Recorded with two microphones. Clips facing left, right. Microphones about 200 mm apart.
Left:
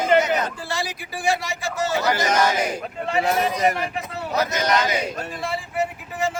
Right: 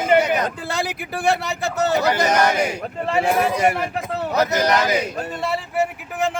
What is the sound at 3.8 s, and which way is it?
Speech, 50° right (ahead or behind).